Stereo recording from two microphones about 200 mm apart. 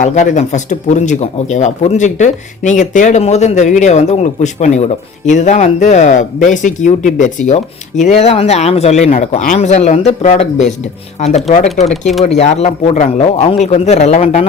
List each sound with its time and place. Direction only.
0.0 s speech: 40° left (ahead or behind)